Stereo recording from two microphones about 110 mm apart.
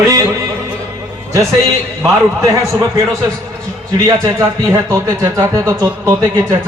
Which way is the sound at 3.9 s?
30° right (ahead or behind).